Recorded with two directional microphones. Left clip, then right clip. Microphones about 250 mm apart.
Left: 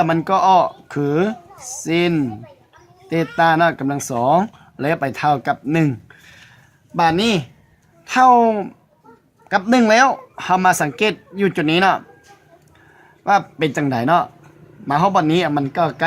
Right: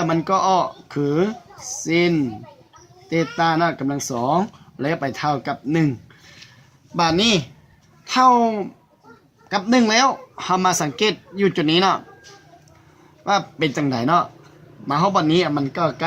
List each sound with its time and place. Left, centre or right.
0.0 s speech: left
13.2 s speech: left